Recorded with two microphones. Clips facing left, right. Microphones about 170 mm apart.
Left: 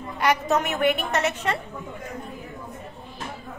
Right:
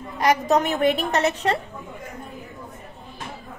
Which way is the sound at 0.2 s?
35° right (ahead or behind).